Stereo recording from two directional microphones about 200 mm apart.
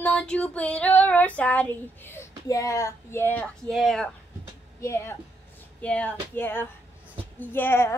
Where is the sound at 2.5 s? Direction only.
15° left (ahead or behind).